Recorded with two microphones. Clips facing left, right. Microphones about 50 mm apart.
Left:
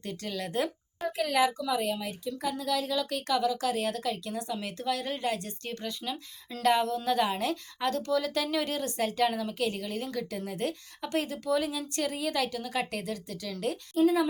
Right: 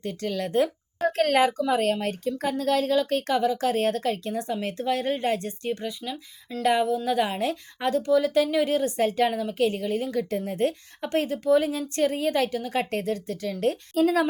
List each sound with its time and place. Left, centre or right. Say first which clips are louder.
0.0 s speech: right 7 dB; right
1.0 s a woman's voice: right 6 dB; right
1.8 s speech: right 7 dB; right
5.6 s speech: right 8 dB; right
6.0 s speech: right 2 dB; centre
6.6 s speech: right 3 dB; centre; by 13.5 s right
13.9 s speech: right 1 dB; right